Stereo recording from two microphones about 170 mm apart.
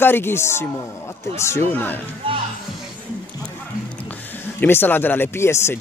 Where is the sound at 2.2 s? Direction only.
30° right (ahead or behind).